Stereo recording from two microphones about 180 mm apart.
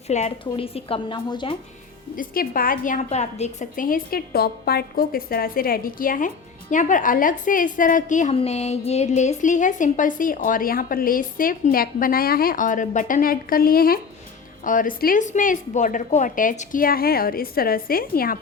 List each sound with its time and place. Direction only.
0.1 s a woman's voice: 35° left (ahead or behind)
2.1 s a woman's voice: 50° left (ahead or behind)